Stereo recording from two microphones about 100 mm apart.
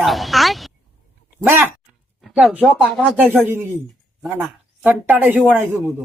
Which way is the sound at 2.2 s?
5° right (ahead or behind).